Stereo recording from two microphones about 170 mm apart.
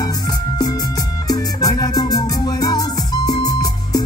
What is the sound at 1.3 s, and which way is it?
Music, 20° left (ahead or behind).